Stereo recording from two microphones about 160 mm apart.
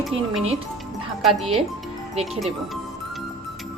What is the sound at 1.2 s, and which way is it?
Speech, centre (ahead or behind).